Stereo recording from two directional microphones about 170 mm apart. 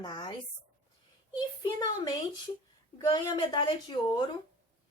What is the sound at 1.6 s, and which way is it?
Speech, 25° left (ahead or behind).